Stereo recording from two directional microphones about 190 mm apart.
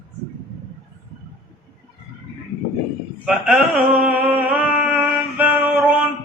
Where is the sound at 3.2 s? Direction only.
5° right (ahead or behind).